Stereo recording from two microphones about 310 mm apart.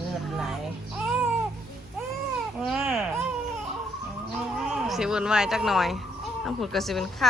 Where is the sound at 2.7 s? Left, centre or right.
Centre.